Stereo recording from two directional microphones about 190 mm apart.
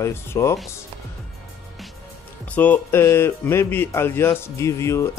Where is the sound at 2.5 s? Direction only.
10° left (ahead or behind).